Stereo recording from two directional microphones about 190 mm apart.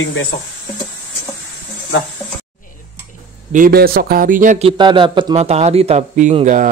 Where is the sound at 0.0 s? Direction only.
90° left.